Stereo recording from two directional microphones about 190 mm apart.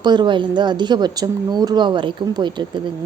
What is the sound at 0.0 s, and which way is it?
Speech, 25° right (ahead or behind).